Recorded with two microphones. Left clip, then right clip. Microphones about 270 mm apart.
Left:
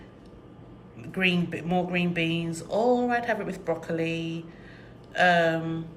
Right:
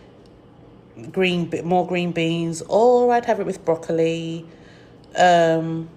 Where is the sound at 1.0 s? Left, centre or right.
Centre.